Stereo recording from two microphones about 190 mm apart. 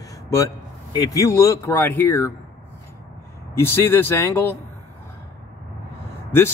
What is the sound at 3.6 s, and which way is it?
Speech, 10° left (ahead or behind).